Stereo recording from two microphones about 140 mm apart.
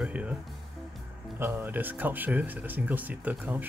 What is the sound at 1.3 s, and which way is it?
Speech, 15° right (ahead or behind).